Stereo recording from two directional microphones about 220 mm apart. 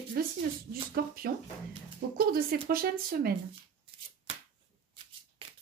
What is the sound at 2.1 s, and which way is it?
Speech, 45° right (ahead or behind).